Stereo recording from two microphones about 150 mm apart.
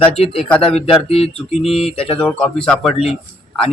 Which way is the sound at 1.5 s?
Centre (ahead or behind).